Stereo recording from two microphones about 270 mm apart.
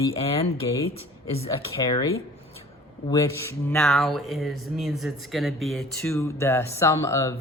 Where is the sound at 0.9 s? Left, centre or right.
Left.